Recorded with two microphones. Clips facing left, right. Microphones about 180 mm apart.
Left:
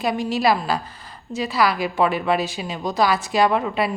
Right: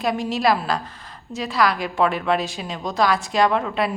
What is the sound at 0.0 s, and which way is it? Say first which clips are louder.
A woman's voice: left 1 dB; centre (ahead or behind).